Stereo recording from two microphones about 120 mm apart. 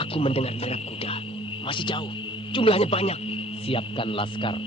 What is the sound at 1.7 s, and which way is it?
A man's voice, 45° left (ahead or behind).